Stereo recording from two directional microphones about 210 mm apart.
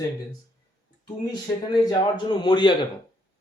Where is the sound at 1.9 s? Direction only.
20° left (ahead or behind).